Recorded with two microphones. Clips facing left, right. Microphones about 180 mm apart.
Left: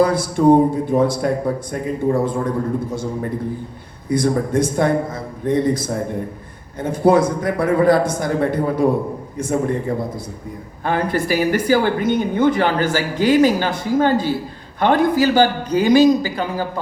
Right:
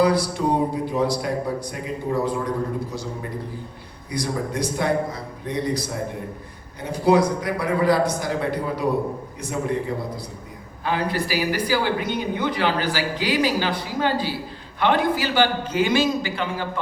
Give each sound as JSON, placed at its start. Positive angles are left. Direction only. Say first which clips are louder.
{"t": 0.0, "sound": "speech", "louder": "left 5 dB", "side_deg": 50}
{"t": 4.1, "sound": "speech", "louder": "left 9 dB", "side_deg": 50}
{"t": 10.8, "sound": "a man's voice", "louder": "left 5 dB", "side_deg": 50}